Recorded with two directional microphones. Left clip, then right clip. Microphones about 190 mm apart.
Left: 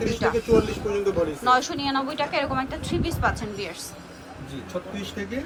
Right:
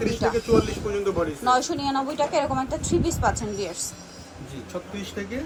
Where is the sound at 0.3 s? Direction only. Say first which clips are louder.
Left 1 dB; centre (ahead or behind).